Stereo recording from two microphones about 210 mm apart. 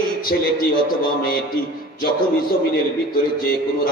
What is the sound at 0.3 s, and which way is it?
Speech, 45° left (ahead or behind).